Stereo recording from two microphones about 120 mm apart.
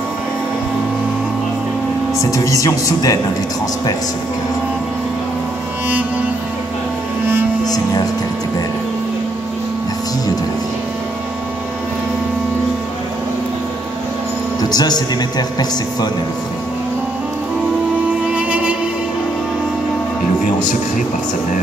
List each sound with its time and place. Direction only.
2.3 s speech: 25° left (ahead or behind)
7.6 s speech: 30° left (ahead or behind)
14.6 s speech: 35° left (ahead or behind)
18.3 s music: 10° right (ahead or behind)